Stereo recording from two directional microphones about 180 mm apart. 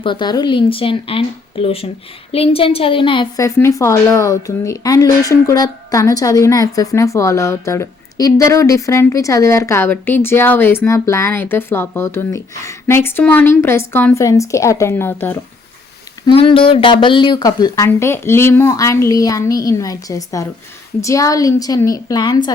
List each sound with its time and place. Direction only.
0.0 s a woman's voice: 25° left (ahead or behind)
16.2 s speech: 30° left (ahead or behind)